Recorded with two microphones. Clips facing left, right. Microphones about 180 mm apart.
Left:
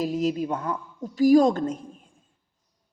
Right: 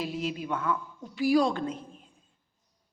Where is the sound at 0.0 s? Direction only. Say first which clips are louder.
Left 8 dB; 40° left (ahead or behind).